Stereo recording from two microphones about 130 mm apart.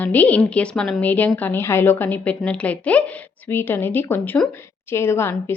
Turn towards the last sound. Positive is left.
turn(degrees=20)  # may be behind; listen again after turning